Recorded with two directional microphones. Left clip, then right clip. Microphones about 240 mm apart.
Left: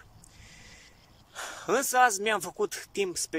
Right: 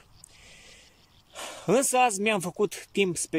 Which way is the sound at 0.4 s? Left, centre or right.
Centre.